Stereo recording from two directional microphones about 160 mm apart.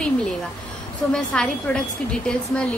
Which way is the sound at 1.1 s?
5° left (ahead or behind).